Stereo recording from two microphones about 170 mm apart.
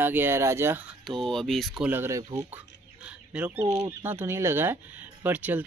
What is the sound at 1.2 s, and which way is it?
Speech, centre (ahead or behind).